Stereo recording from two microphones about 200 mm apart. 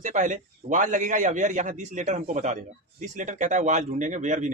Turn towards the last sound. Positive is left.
turn(degrees=-35)  # may be behind; listen again after turning